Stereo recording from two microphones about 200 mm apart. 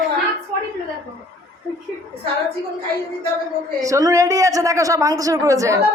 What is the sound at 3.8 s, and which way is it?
A woman's voice, 15° right (ahead or behind).